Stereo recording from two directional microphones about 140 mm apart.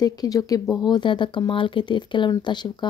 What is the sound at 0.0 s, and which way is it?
Speech, 25° left (ahead or behind).